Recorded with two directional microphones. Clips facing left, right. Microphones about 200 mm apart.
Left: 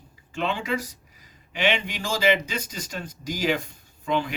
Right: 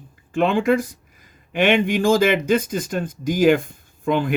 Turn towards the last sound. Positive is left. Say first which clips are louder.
# right 5 dB
turn(degrees=-50)  # may be behind; listen again after turning